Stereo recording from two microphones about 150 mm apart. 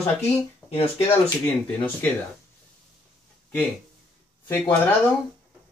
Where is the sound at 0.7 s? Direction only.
40° left (ahead or behind).